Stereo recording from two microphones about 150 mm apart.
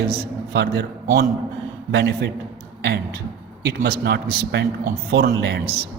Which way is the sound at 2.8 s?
90° right.